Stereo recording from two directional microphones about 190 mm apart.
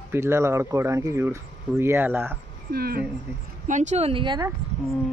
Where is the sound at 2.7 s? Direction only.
55° right (ahead or behind).